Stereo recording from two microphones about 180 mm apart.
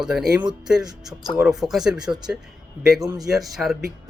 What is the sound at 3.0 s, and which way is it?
Speech, 20° right (ahead or behind).